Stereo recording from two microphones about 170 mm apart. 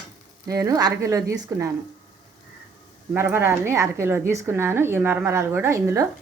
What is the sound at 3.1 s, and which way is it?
A woman's voice, 15° right (ahead or behind).